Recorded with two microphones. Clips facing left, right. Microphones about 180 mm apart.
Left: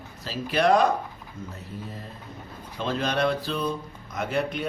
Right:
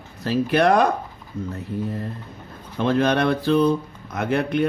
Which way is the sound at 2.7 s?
60° right (ahead or behind).